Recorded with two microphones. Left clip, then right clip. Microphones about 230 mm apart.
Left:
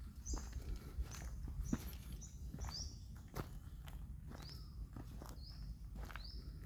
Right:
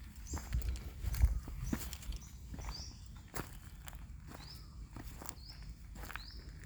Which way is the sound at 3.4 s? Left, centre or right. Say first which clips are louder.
Right 5 dB; right.